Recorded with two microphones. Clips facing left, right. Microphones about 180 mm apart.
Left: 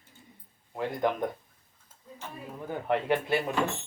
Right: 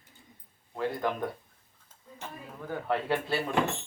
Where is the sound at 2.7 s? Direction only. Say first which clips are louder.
Left 2 dB; 20° left (ahead or behind).